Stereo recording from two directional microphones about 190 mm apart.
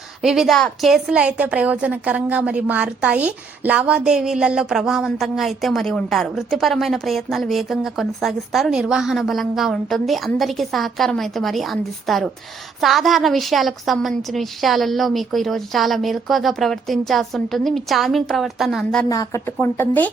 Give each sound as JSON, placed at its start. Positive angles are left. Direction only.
{"t": 0.2, "sound": "a woman's voice", "side_deg": -5}
{"t": 19.0, "sound": "speech", "side_deg": 15}